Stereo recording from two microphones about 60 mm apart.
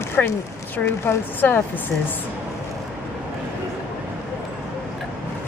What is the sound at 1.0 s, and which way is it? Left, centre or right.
Speech, left.